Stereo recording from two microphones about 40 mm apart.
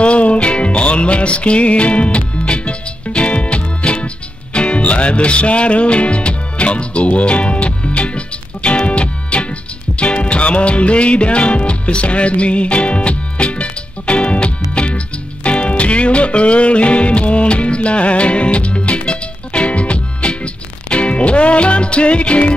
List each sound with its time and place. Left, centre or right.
0.0 s music: left